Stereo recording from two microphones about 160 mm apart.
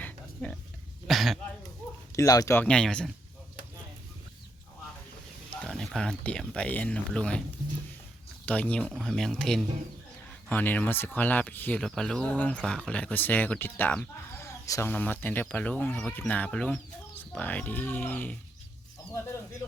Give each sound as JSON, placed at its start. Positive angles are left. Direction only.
{"t": 0.4, "sound": "speech", "side_deg": 5}
{"t": 2.1, "sound": "speech", "side_deg": 20}
{"t": 2.6, "sound": "speech", "side_deg": 5}
{"t": 5.5, "sound": "speech", "side_deg": 5}
{"t": 8.4, "sound": "speech", "side_deg": 10}